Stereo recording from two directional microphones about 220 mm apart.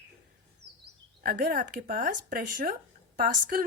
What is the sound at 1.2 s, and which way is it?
Speech, 45° right (ahead or behind).